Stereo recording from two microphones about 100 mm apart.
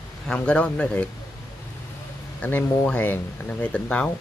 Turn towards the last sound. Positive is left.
turn(degrees=10)  # may be behind; listen again after turning